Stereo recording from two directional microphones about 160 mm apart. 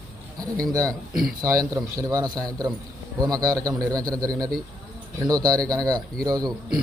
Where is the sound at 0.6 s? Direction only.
60° right (ahead or behind).